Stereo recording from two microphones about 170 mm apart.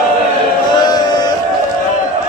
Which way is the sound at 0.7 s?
25° left (ahead or behind).